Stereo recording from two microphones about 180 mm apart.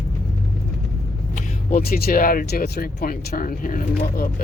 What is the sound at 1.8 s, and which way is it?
Speech, 55° left (ahead or behind).